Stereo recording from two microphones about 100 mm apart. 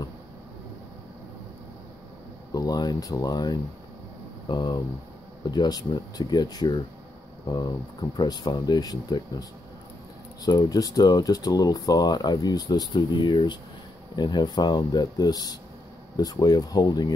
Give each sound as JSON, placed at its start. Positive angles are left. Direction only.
{"t": 2.5, "sound": "speech", "side_deg": 40}